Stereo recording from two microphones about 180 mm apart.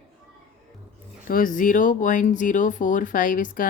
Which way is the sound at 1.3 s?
50° left (ahead or behind).